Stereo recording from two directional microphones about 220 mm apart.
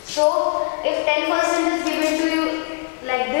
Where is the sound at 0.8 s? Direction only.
15° left (ahead or behind).